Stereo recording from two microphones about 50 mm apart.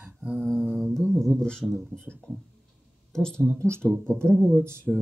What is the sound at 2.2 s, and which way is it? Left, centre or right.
Speech, centre.